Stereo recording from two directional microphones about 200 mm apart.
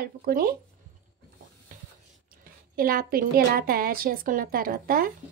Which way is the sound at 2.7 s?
45° right (ahead or behind).